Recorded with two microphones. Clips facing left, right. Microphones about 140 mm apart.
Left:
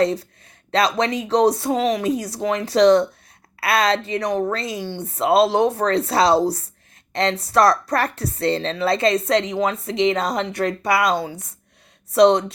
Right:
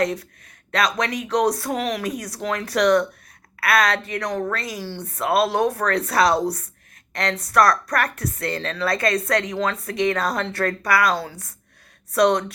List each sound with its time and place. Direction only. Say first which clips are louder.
0.0 s a woman's voice: left 4 dB; 30° left (ahead or behind)